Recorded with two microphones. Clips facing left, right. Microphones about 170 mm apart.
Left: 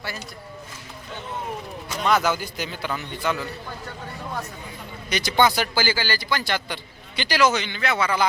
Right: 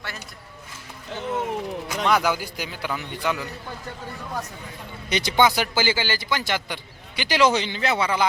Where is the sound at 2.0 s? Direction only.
10° right (ahead or behind).